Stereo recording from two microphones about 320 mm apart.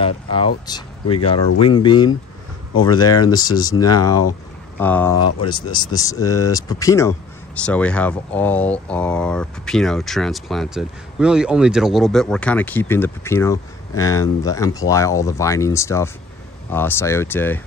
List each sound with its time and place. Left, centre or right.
0.0 s speech: centre